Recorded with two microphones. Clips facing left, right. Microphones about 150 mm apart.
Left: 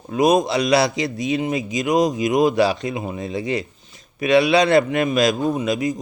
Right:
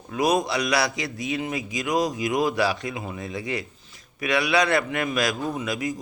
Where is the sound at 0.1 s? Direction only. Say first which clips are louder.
Left 6 dB; 20° left (ahead or behind).